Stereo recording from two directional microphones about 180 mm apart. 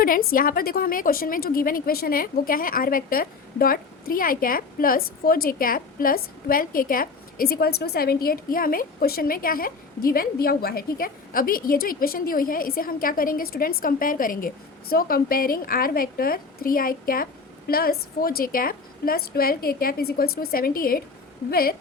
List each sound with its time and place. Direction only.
0.0 s a woman's voice: 55° left (ahead or behind)